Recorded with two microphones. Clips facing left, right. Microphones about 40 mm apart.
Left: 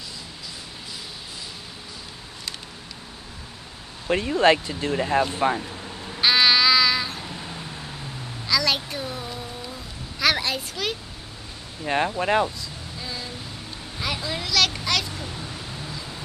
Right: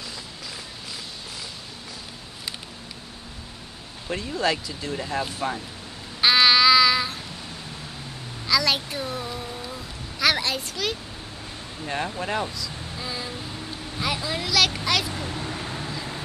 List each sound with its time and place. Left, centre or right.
4.1 s speech: left
6.2 s child singing: centre
8.5 s a sound: centre
11.8 s speech: left
12.9 s a sound: centre
15.2 s vehicle: right